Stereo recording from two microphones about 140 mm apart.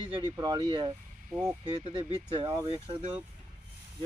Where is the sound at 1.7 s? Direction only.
35° right (ahead or behind).